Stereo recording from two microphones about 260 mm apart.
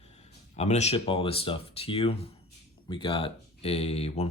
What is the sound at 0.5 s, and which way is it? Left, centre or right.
Speech, left.